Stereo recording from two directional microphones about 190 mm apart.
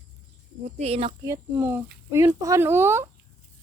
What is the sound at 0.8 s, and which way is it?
Speech, 30° right (ahead or behind).